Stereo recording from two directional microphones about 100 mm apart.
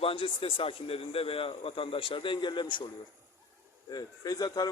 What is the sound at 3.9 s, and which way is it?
Speech, 40° left (ahead or behind).